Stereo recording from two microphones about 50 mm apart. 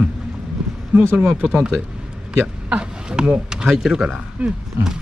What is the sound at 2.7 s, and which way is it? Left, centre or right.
Speech, centre.